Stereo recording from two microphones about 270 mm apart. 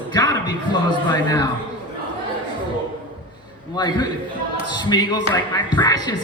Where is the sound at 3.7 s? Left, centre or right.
Centre.